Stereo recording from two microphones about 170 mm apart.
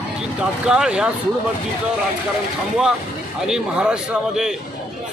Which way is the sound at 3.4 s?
5° right (ahead or behind).